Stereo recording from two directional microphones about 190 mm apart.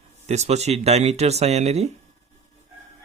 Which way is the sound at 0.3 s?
35° right (ahead or behind).